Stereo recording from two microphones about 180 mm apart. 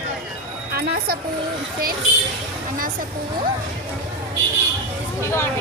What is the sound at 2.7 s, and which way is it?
Speech, 50° right (ahead or behind).